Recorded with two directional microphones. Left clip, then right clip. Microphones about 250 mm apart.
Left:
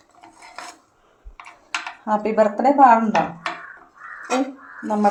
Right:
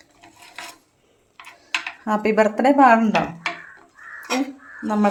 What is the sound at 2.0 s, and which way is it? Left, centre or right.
Speech, right.